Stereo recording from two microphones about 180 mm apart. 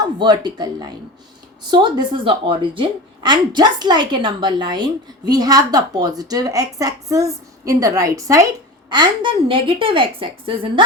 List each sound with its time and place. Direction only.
0.0 s a woman's voice: 25° right (ahead or behind)